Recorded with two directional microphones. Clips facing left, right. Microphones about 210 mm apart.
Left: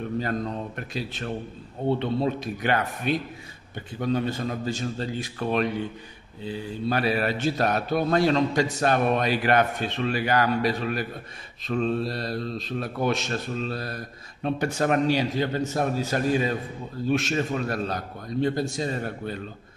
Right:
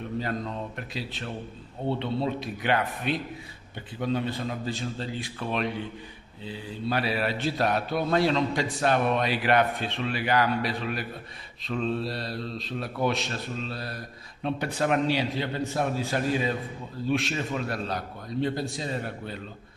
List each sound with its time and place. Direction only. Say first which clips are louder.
0.7 s speech: left 3 dB; 45° left (ahead or behind)